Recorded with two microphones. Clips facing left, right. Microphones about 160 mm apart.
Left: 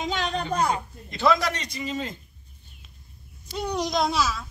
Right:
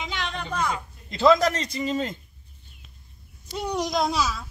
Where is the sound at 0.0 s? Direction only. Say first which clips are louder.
Left 5 dB; 40° left (ahead or behind).